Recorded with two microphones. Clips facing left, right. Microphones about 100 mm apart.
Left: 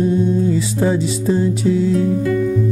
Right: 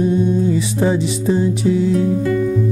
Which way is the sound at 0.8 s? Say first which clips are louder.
Even; 20° right (ahead or behind).